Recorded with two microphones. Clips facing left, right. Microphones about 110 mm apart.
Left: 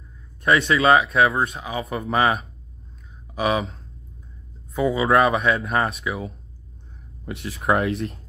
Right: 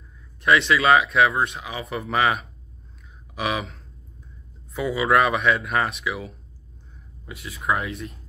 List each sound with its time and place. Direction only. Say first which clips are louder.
0.5 s speech: left 1 dB; 35° left (ahead or behind)
7.2 s speech: left 4 dB; 65° left (ahead or behind)